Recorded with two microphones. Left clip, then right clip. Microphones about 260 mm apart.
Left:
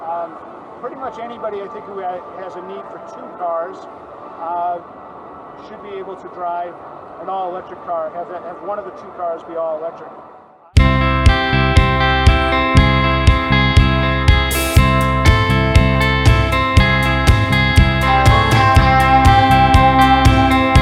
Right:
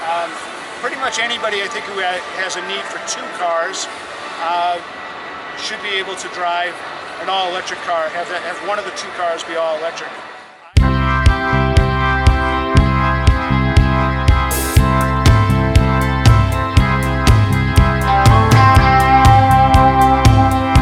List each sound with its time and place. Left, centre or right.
0.8 s speech: centre
3.4 s speech: centre
6.4 s speech: centre
10.8 s music: centre